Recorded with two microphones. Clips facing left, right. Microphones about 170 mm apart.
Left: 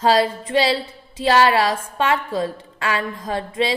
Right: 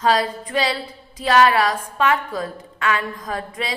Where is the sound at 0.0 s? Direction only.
30° left (ahead or behind).